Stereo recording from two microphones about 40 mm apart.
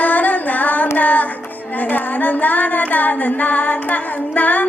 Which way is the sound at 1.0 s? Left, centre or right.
Left.